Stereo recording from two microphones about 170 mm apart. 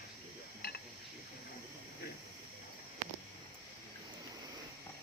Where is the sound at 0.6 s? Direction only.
65° left (ahead or behind).